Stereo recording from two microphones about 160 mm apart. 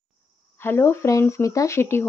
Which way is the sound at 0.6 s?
15° left (ahead or behind).